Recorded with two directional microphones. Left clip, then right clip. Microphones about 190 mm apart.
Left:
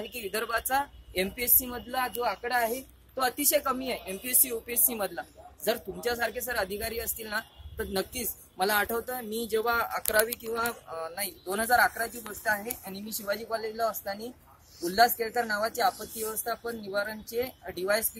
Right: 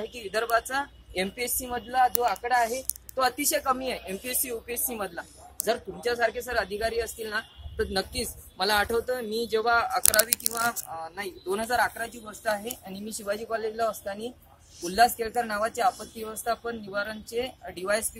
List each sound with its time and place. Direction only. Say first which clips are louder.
0.0 s a woman's voice: right 3 dB; 55° left (ahead or behind)
3.2 s speech: right 1 dB; 25° left (ahead or behind)
4.3 s a woman's voice: even; 35° left (ahead or behind)
10.5 s a woman's voice: right 2 dB; 40° left (ahead or behind)
13.5 s speech: right 3 dB; centre (ahead or behind)